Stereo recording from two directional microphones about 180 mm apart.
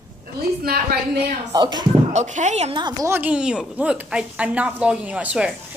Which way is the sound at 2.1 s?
40° right (ahead or behind).